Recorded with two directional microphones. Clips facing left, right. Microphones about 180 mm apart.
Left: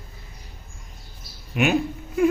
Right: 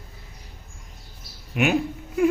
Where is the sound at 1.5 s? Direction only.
5° right (ahead or behind).